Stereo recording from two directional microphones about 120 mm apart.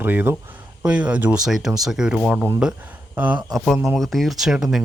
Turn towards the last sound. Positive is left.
turn(degrees=-5)  # may be behind; listen again after turning